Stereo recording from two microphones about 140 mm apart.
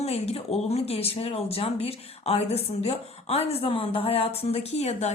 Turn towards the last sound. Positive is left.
turn(degrees=55)  # may be behind; listen again after turning